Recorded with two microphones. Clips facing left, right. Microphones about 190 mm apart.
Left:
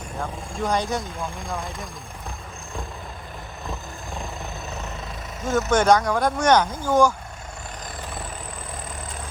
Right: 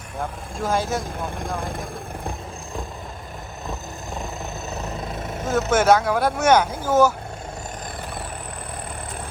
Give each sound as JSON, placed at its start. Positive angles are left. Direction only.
{"t": 0.6, "sound": "speech", "side_deg": -5}
{"t": 5.5, "sound": "speech", "side_deg": -5}